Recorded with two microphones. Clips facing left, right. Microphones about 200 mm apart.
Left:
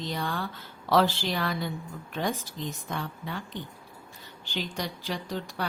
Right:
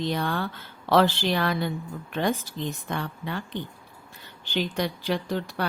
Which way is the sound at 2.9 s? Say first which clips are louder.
Right 3 dB; 65° right (ahead or behind).